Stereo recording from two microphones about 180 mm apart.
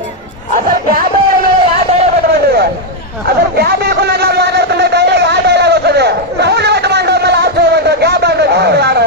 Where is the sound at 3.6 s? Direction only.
60° right (ahead or behind).